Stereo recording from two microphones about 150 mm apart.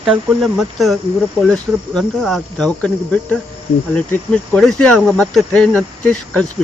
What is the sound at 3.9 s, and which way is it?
Speech, 5° left (ahead or behind).